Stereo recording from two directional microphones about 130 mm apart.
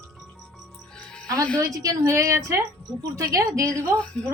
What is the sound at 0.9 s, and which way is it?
Music, 5° left (ahead or behind).